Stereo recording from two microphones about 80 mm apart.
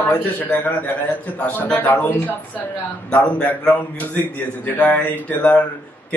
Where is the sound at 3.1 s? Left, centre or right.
Centre.